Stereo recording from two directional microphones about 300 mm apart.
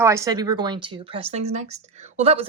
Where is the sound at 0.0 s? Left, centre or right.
Centre.